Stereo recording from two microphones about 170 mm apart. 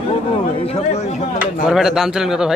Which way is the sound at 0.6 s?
35° left (ahead or behind).